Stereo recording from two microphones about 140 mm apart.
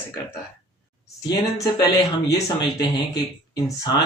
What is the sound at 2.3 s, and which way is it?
Speech, 30° left (ahead or behind).